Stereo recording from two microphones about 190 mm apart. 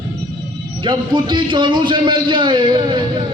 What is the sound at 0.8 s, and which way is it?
A man's voice, 25° right (ahead or behind).